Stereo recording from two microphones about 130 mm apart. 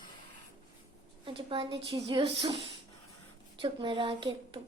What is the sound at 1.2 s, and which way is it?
A woman's voice, 40° right (ahead or behind).